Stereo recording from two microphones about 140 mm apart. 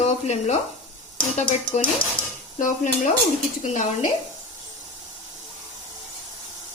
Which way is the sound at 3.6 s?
60° left (ahead or behind).